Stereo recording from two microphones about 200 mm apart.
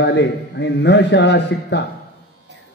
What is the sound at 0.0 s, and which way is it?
A man's voice, 60° left (ahead or behind).